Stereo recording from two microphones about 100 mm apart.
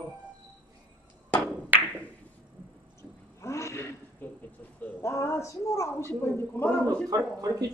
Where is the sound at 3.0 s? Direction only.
30° left (ahead or behind).